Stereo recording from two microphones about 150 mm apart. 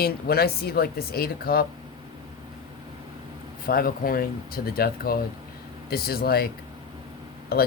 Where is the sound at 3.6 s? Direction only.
80° left.